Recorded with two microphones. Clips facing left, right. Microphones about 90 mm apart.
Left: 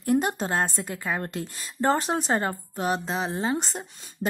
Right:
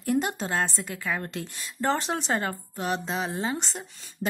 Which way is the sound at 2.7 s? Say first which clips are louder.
Left 2 dB; 40° left (ahead or behind).